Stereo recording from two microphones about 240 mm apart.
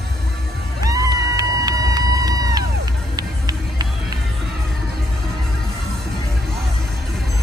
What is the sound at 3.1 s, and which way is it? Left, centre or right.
Music, centre.